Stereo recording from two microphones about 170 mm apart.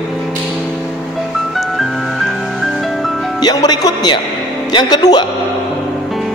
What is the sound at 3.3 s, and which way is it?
A man's voice, 25° left (ahead or behind).